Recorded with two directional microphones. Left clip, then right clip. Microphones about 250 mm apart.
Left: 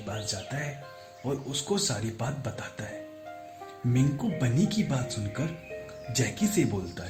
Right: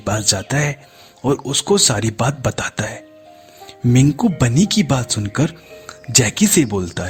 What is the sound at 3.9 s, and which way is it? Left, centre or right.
Speech, right.